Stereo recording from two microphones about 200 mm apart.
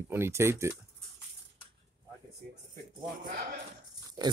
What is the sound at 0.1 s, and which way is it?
Speech, 10° right (ahead or behind).